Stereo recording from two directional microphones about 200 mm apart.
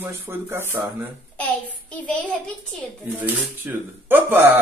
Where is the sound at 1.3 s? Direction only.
5° left (ahead or behind).